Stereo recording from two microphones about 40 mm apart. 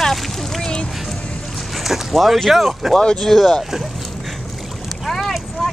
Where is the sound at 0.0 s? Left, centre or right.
Centre.